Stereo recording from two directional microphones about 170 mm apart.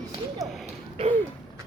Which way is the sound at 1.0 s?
35° right (ahead or behind).